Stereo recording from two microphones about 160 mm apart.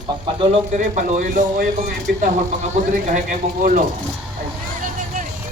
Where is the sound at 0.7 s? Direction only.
50° right (ahead or behind).